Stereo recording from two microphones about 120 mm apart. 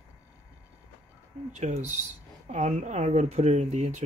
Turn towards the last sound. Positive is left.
turn(degrees=-75)  # may be behind; listen again after turning